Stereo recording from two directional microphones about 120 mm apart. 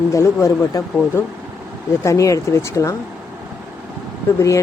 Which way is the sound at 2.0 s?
25° left (ahead or behind).